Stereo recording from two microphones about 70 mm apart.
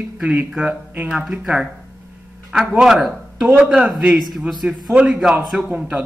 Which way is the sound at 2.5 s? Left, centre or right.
Centre.